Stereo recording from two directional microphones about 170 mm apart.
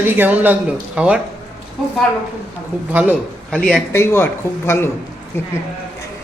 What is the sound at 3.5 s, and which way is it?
Speech, 5° left (ahead or behind).